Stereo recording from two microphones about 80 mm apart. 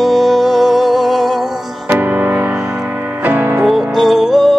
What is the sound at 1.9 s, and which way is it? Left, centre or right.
Music, right.